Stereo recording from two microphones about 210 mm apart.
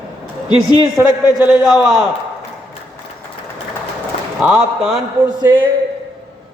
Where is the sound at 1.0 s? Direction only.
10° right (ahead or behind).